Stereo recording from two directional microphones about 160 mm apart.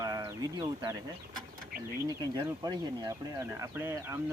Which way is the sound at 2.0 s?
25° right (ahead or behind).